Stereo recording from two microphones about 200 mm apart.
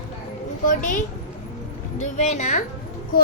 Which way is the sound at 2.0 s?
35° left (ahead or behind).